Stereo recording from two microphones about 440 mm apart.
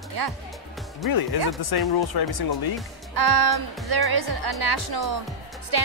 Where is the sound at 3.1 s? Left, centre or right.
Right.